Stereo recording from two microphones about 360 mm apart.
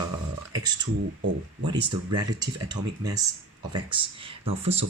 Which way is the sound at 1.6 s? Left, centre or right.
Centre.